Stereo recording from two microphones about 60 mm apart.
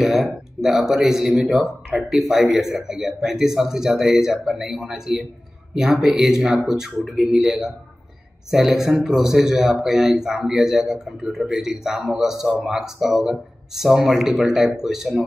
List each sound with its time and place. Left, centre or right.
0.0 s speech: centre